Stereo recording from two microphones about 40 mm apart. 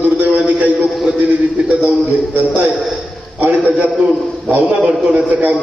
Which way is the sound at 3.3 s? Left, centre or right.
Right.